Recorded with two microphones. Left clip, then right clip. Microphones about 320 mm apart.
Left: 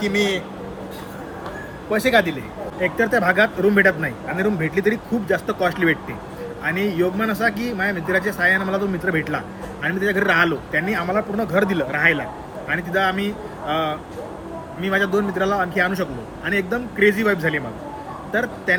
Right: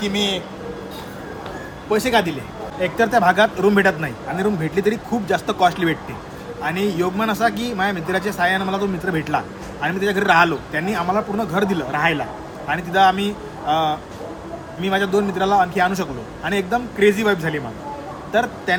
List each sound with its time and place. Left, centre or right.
0.1 s a man's voice: right
1.9 s a man's voice: centre
14.8 s a man's voice: centre